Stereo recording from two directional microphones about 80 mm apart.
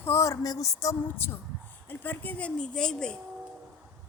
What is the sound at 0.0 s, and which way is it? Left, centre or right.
Speech, left.